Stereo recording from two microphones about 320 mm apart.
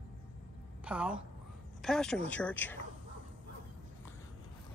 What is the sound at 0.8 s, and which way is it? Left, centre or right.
A woman's voice, centre.